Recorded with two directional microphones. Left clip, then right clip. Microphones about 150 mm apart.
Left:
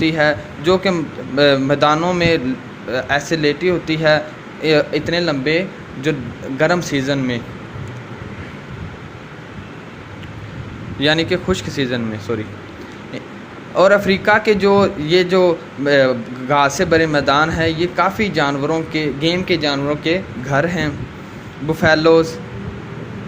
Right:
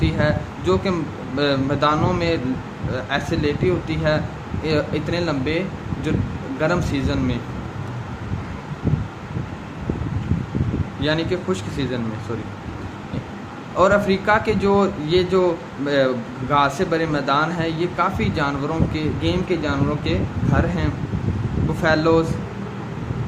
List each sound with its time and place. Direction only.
0.0 s speech: 35° left (ahead or behind)
11.0 s speech: 40° left (ahead or behind)
13.7 s speech: 35° left (ahead or behind)